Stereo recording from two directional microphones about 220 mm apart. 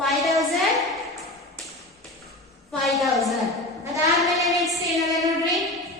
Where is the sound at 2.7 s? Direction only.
Centre (ahead or behind).